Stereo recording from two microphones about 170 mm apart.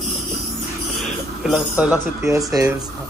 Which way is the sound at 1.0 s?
5° right (ahead or behind).